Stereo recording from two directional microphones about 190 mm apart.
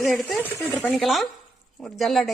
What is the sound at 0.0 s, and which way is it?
Speech, centre (ahead or behind).